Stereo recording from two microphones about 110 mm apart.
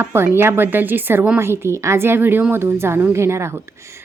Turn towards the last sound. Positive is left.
turn(degrees=-25)  # may be behind; listen again after turning